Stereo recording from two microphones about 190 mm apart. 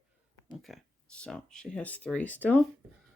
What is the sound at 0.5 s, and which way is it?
Speech, centre (ahead or behind).